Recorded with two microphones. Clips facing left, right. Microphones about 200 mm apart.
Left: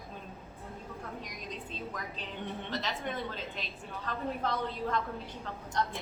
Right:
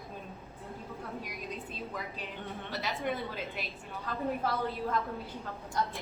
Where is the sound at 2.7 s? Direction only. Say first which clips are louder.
Right 4 dB; 10° right (ahead or behind).